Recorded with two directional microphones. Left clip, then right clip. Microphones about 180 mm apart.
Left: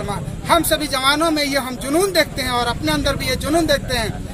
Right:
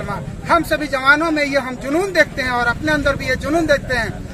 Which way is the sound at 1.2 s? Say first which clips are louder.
Right 1 dB; centre (ahead or behind).